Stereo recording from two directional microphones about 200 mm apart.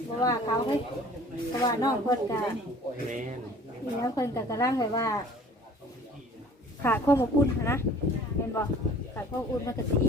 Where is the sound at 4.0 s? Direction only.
15° left (ahead or behind).